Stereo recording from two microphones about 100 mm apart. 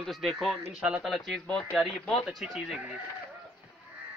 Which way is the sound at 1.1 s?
5° left (ahead or behind).